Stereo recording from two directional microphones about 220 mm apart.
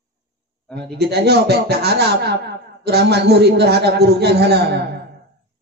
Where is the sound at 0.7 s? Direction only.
50° right (ahead or behind).